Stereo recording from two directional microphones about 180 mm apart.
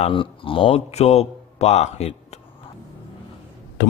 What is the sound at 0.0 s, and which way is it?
Speech, 30° left (ahead or behind).